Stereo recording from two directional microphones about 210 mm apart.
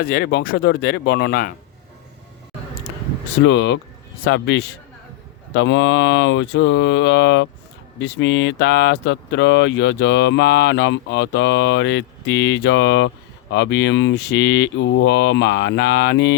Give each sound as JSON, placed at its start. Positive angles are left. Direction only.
{"t": 0.0, "sound": "speech", "side_deg": 45}
{"t": 3.4, "sound": "speech", "side_deg": 60}